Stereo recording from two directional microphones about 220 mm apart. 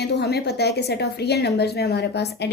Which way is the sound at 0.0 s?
50° left (ahead or behind).